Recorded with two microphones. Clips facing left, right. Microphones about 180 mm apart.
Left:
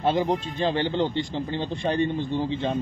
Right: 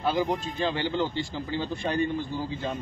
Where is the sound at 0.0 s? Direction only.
25° left (ahead or behind).